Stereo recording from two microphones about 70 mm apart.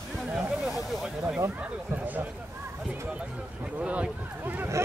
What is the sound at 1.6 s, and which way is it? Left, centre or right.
Speech, right.